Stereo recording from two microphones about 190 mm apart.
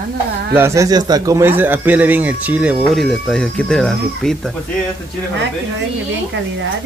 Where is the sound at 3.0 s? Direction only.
5° left (ahead or behind).